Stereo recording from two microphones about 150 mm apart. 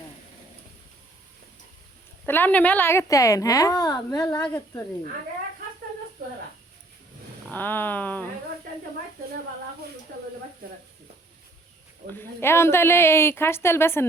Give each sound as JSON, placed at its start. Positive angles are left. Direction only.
{"t": 2.2, "sound": "a woman's voice", "side_deg": 15}
{"t": 7.5, "sound": "a woman's voice", "side_deg": 15}
{"t": 12.1, "sound": "a woman's voice", "side_deg": 15}